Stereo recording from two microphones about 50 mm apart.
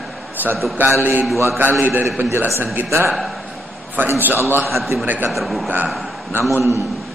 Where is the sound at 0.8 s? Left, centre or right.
Right.